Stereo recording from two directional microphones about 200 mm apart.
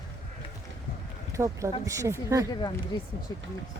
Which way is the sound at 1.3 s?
15° right (ahead or behind).